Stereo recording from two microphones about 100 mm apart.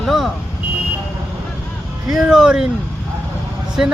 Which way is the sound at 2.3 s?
5° right (ahead or behind).